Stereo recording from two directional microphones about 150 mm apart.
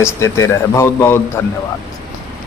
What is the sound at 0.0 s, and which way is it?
Speech, 20° left (ahead or behind).